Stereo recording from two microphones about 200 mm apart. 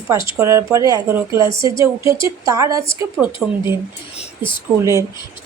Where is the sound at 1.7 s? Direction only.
15° right (ahead or behind).